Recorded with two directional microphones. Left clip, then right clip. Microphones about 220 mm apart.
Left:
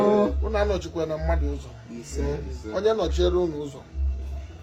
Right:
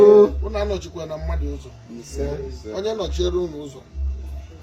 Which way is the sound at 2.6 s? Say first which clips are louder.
Left 3 dB; 20° left (ahead or behind).